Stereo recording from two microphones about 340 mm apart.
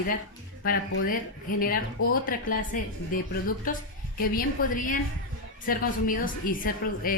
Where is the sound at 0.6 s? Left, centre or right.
Left.